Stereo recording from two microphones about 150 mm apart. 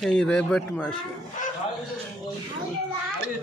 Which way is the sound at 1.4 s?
60° left (ahead or behind).